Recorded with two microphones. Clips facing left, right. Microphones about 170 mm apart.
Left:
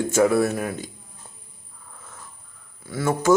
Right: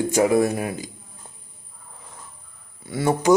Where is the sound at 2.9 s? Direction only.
20° right (ahead or behind).